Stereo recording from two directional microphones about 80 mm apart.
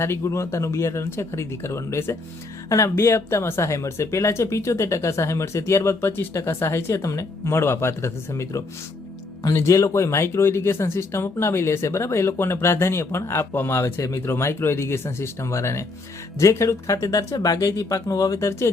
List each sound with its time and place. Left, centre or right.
0.0 s speech: left